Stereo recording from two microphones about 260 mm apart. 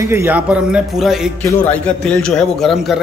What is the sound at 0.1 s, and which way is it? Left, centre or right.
A man's voice, centre.